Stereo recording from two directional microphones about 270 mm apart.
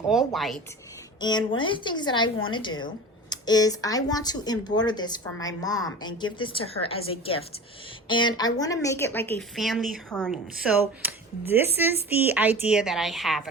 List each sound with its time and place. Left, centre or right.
0.3 s speech: centre
1.2 s speech: centre